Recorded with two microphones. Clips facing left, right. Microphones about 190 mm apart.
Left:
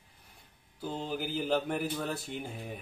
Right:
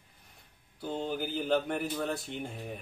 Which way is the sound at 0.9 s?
5° left (ahead or behind).